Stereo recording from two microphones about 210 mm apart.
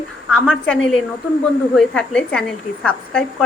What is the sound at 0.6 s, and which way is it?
A woman's voice, 5° left (ahead or behind).